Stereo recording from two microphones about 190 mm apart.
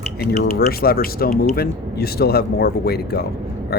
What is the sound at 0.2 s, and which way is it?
Speech, 55° left (ahead or behind).